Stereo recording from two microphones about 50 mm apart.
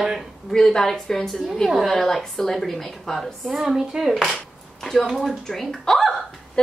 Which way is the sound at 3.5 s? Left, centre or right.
Centre.